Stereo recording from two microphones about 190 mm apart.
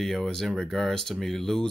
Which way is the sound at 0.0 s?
Centre (ahead or behind).